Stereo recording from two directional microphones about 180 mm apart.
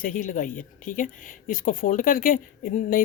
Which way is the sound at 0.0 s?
50° left (ahead or behind).